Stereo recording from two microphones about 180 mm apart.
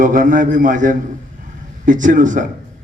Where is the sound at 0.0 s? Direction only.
45° right (ahead or behind).